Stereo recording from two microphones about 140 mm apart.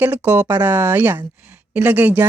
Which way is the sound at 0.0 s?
10° right (ahead or behind).